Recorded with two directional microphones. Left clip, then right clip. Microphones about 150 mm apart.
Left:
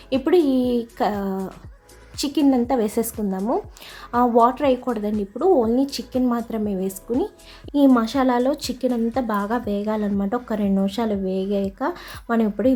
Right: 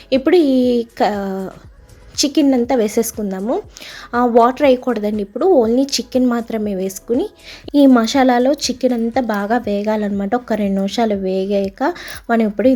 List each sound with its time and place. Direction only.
0.1 s a woman's voice: 15° right (ahead or behind)